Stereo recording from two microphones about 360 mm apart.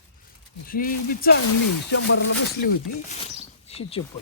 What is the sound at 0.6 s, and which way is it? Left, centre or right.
Speech, left.